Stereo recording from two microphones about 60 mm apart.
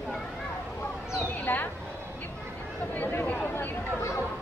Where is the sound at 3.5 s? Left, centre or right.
Left.